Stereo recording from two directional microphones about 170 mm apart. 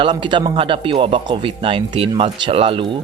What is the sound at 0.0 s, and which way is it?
Speech, 30° right (ahead or behind).